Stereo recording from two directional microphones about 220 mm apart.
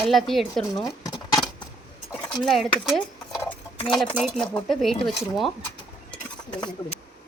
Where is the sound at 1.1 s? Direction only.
15° left (ahead or behind).